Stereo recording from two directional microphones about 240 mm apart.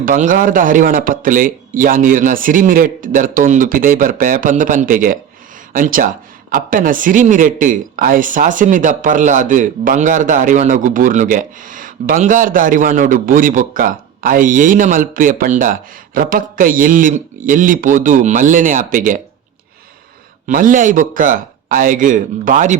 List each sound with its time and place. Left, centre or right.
0.0 s speech: right
20.5 s speech: right